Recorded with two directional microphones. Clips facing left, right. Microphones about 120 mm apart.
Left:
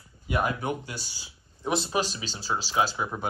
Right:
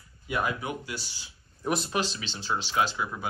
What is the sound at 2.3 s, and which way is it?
Speech, 40° left (ahead or behind).